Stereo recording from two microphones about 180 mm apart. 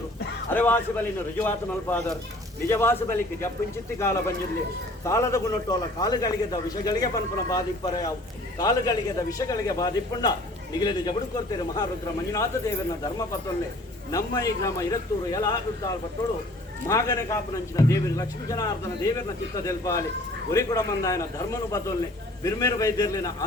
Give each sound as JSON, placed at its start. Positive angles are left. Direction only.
{"t": 0.5, "sound": "a man's voice", "side_deg": 10}
{"t": 12.3, "sound": "speech", "side_deg": 15}
{"t": 14.1, "sound": "a man's voice", "side_deg": 20}